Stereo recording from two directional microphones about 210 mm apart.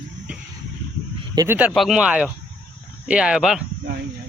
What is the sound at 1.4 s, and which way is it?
Speech, 10° right (ahead or behind).